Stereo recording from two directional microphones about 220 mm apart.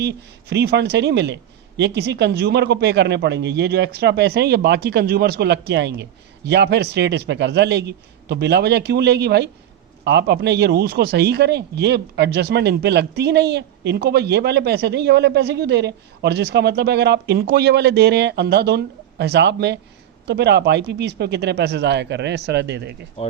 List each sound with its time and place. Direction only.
0.0 s a man's voice: 50° right (ahead or behind)
23.2 s speech: 25° left (ahead or behind)